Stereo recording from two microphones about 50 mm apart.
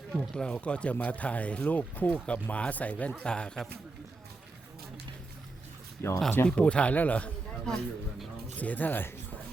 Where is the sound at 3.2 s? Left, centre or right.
Centre.